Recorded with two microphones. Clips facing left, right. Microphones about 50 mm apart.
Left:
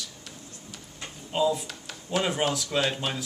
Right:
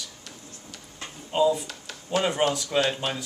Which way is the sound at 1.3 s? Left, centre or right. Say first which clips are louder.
Right 3 dB; centre.